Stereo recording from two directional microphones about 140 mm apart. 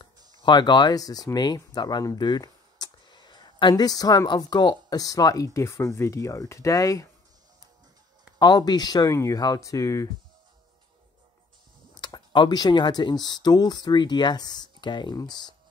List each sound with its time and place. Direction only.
0.4 s speech: 30° left (ahead or behind)
8.4 s speech: 30° left (ahead or behind)
12.0 s speech: 35° left (ahead or behind)